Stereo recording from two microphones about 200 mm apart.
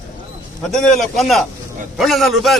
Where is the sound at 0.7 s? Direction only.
5° left (ahead or behind).